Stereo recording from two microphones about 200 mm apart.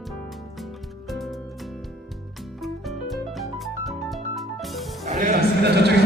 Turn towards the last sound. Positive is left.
turn(degrees=-55)  # may be behind; listen again after turning